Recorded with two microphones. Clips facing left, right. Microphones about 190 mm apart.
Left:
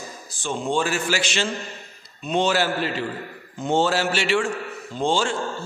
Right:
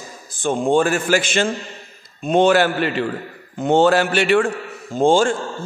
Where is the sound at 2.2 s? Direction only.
50° right (ahead or behind).